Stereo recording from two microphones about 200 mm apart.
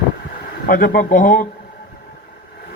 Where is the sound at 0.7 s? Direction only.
45° left (ahead or behind).